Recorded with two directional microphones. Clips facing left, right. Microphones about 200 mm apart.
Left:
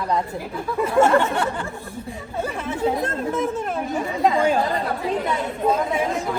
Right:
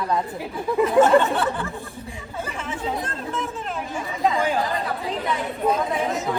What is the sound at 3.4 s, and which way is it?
Chatter, 45° left (ahead or behind).